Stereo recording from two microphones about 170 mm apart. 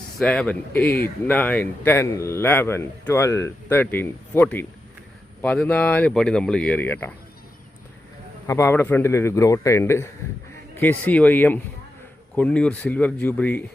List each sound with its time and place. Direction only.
0.2 s speech: 5° left (ahead or behind)
8.4 s speech: 15° left (ahead or behind)